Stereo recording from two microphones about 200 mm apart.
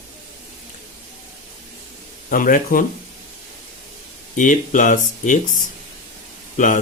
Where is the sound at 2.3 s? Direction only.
45° left (ahead or behind).